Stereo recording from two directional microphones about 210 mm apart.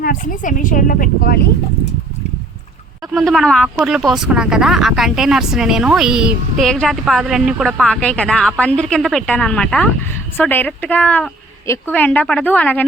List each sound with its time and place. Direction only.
0.0 s a woman's voice: 40° left (ahead or behind)
3.2 s speech: centre (ahead or behind)